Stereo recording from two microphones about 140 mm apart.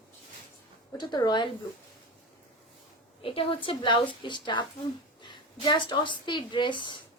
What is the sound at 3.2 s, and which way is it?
A woman's voice, 40° left (ahead or behind).